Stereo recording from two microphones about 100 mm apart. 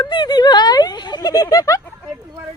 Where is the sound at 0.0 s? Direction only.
45° left (ahead or behind).